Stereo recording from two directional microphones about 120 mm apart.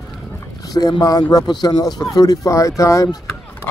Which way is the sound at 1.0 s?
30° left (ahead or behind).